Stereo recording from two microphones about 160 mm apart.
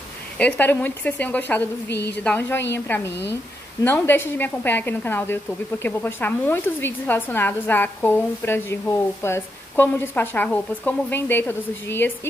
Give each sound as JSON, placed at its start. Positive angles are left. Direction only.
{"t": 0.4, "sound": "a woman's voice", "side_deg": 10}
{"t": 1.9, "sound": "a woman's voice", "side_deg": 90}
{"t": 2.1, "sound": "a woman's voice", "side_deg": 10}